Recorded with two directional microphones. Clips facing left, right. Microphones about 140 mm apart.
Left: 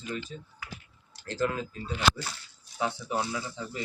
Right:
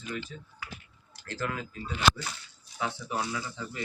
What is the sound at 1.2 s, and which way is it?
Speech, 30° left (ahead or behind).